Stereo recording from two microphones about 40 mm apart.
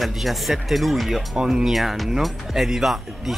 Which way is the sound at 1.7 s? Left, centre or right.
Centre.